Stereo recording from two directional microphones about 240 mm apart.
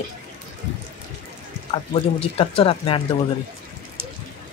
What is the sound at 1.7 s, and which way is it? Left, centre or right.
Speech, left.